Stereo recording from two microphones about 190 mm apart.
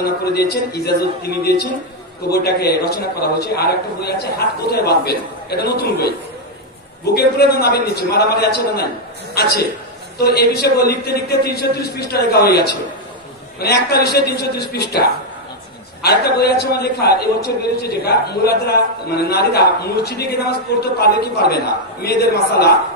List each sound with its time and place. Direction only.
0.0 s a man's voice: 55° left (ahead or behind)
7.2 s a man's voice: 55° left (ahead or behind)